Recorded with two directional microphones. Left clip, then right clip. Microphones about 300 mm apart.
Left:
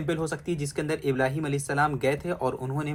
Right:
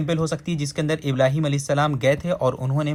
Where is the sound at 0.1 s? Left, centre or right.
Right.